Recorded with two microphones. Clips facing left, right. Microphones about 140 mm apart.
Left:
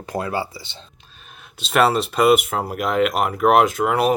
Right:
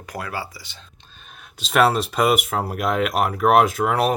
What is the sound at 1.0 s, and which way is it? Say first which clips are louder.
Speech: even; centre (ahead or behind).